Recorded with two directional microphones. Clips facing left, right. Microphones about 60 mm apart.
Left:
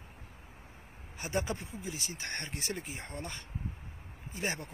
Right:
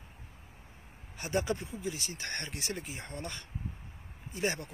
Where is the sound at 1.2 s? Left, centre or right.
Left.